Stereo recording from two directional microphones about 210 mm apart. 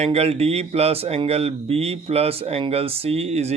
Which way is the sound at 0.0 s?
30° right (ahead or behind).